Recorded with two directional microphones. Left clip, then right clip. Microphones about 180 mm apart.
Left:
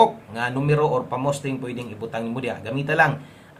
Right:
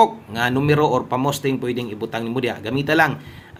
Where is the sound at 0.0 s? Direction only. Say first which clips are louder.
Right 2 dB; 35° right (ahead or behind).